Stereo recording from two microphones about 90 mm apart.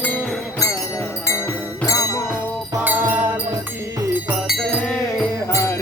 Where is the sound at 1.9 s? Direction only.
40° left (ahead or behind).